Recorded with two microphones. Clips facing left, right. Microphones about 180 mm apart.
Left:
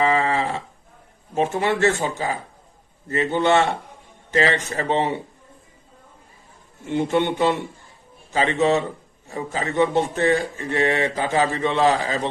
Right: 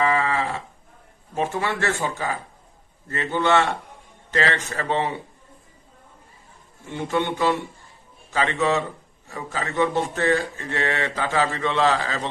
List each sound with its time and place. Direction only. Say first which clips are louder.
0.2 s a sound: left 2 dB; 40° left (ahead or behind)
1.4 s speech: left 5 dB; 20° left (ahead or behind)
6.9 s speech: left 4 dB; 20° left (ahead or behind)